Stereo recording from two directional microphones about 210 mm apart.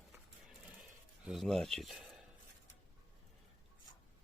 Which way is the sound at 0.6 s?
5° right (ahead or behind).